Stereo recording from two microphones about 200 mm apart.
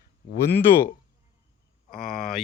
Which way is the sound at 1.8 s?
45° left (ahead or behind).